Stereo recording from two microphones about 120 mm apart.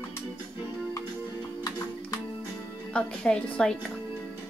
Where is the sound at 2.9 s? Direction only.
5° left (ahead or behind).